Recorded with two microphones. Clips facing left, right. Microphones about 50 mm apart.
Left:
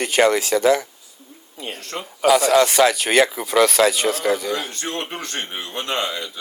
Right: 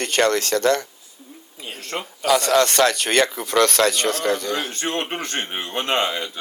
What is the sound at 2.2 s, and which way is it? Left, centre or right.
Speech, centre.